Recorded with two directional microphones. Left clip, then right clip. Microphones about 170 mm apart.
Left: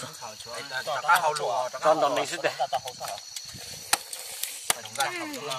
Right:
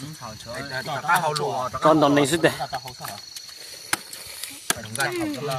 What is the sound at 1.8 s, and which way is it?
Speech, 65° right (ahead or behind).